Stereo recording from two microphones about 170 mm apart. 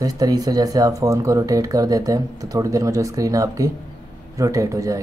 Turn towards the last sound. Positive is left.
turn(degrees=-20)  # may be behind; listen again after turning